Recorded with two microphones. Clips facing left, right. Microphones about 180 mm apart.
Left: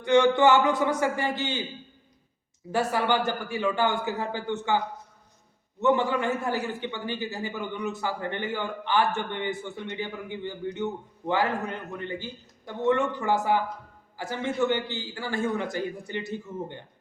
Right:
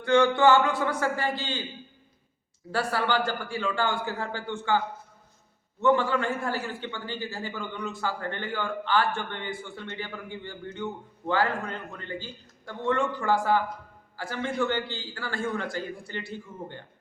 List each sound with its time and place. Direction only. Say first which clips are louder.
0.0 s a man's voice: left 1 dB; 20° left (ahead or behind)
2.7 s a man's voice: left 2 dB; 15° left (ahead or behind)
5.8 s a man's voice: even; 20° left (ahead or behind)